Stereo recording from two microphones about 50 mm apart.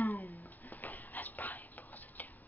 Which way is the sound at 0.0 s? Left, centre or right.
Left.